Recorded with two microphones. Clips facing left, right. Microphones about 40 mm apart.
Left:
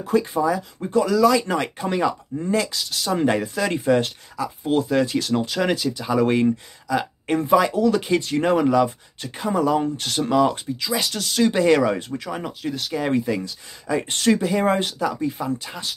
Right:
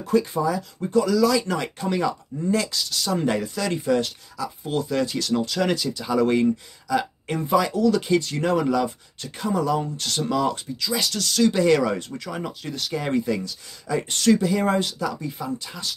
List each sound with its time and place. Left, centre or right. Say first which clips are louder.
0.0 s speech: left 1 dB; centre
14.0 s speech: right 2 dB; left